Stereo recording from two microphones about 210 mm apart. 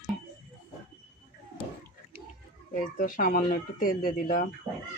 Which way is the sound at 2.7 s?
40° left (ahead or behind).